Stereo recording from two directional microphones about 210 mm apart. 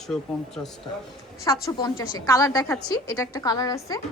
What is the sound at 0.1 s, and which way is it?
Speech, centre (ahead or behind).